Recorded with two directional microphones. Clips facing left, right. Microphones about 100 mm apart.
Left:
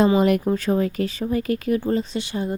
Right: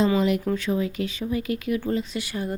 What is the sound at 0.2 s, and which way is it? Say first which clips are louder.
Speech: left 4 dB; 50° left (ahead or behind).